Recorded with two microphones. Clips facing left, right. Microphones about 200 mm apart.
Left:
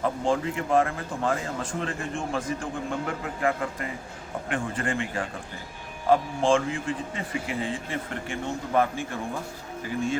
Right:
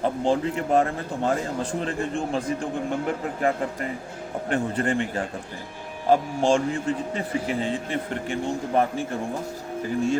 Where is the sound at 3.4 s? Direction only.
35° right (ahead or behind).